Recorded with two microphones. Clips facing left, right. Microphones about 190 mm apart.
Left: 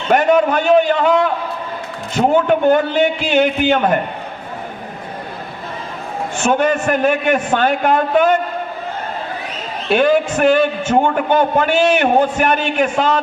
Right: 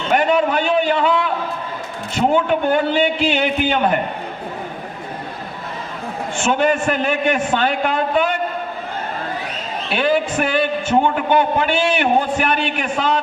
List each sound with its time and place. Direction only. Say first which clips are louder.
0.1 s a man's voice: left 4 dB; 45° left (ahead or behind)
2.5 s a man's voice: left 4 dB; 45° left (ahead or behind)
6.5 s a man's voice: left 2 dB; 40° left (ahead or behind)
9.9 s a man's voice: left 5 dB; 45° left (ahead or behind)